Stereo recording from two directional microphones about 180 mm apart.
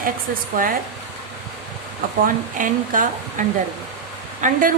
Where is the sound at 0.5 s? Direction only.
50° right (ahead or behind).